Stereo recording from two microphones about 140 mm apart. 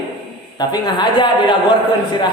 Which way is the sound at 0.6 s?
30° left (ahead or behind).